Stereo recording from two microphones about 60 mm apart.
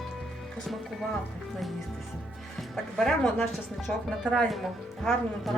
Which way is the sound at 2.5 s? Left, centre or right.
Centre.